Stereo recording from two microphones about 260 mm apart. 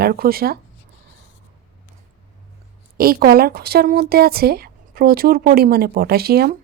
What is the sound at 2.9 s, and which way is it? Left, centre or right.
A woman's voice, right.